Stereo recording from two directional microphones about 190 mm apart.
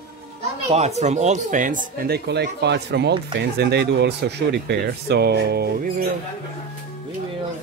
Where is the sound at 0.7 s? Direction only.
35° right (ahead or behind); by 5.7 s 55° right (ahead or behind).